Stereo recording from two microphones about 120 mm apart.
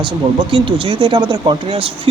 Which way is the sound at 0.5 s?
45° right (ahead or behind).